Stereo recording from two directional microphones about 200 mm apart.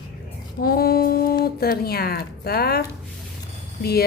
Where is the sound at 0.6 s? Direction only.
50° left (ahead or behind).